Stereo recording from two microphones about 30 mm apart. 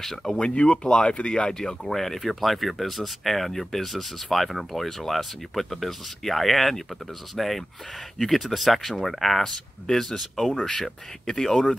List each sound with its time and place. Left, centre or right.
0.0 s speech: centre
0.3 s speech: left
1.9 s speech: centre
9.8 s speech: centre